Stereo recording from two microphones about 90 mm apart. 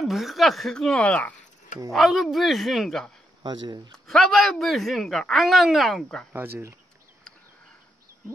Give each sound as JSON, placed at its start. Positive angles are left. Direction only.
{"t": 0.0, "sound": "speech", "side_deg": 0}
{"t": 1.9, "sound": "speech", "side_deg": 0}
{"t": 3.4, "sound": "speech", "side_deg": -55}
{"t": 4.1, "sound": "speech", "side_deg": 0}
{"t": 6.3, "sound": "speech", "side_deg": -30}